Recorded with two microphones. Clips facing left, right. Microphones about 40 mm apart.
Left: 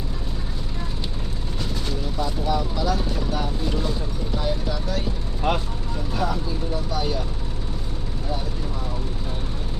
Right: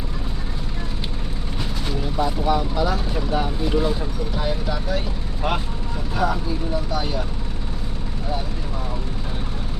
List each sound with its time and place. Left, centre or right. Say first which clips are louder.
2.0 s speech: right 6 dB; centre